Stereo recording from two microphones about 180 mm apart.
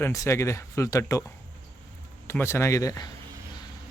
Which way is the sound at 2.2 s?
15° left (ahead or behind).